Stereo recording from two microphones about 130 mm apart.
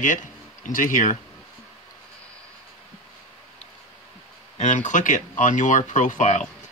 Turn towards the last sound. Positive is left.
turn(degrees=65)  # may be behind; listen again after turning